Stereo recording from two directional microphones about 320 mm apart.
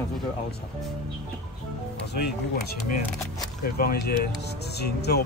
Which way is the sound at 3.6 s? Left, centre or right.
Left.